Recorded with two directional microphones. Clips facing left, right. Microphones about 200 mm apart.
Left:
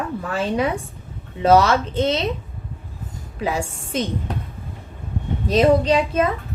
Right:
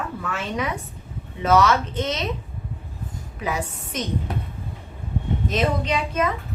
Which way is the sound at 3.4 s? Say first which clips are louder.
Left 3 dB; 30° left (ahead or behind).